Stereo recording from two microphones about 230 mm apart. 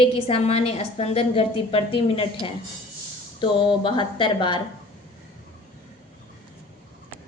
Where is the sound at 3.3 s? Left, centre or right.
Left.